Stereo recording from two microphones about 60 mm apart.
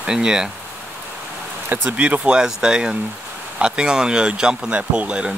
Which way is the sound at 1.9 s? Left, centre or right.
Right.